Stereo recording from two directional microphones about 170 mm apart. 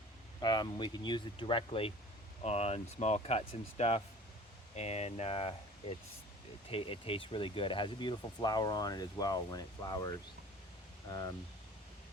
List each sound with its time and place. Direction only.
0.4 s speech: 25° left (ahead or behind)